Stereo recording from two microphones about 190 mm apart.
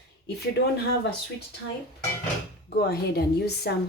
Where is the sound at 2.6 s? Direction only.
55° left (ahead or behind).